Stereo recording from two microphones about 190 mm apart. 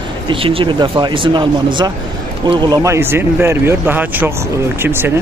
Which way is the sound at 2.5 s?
20° right (ahead or behind).